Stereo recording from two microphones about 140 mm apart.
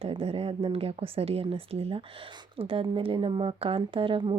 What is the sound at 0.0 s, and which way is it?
Speech, 45° right (ahead or behind).